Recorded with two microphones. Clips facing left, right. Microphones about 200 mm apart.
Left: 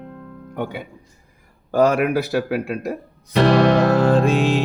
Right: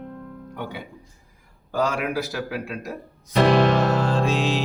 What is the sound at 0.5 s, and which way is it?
Music, 50° left (ahead or behind).